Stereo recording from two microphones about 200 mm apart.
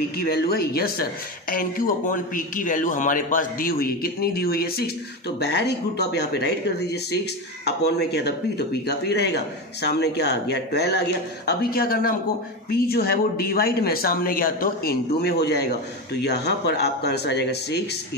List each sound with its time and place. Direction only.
0.3 s speech: 50° left (ahead or behind)